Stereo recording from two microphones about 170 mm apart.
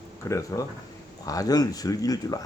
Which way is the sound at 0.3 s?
20° left (ahead or behind).